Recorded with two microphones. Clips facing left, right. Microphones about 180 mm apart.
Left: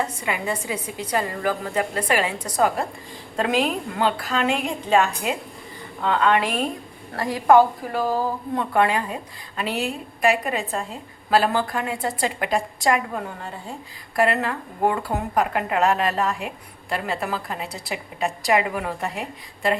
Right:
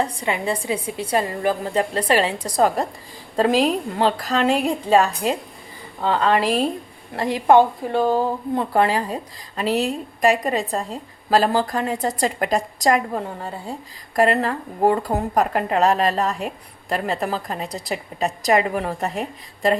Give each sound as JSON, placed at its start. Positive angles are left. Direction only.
{"t": 0.0, "sound": "a woman's voice", "side_deg": -30}
{"t": 7.2, "sound": "a woman's voice", "side_deg": -25}